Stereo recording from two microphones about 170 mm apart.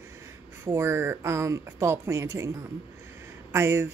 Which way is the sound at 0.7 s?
15° right (ahead or behind).